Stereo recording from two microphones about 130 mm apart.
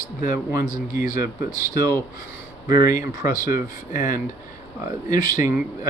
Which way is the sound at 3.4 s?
90° left.